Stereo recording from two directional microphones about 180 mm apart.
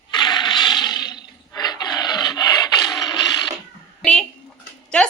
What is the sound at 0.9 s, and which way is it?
Filing, 25° left (ahead or behind).